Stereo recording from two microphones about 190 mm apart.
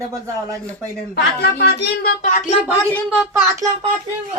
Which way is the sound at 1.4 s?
60° left (ahead or behind).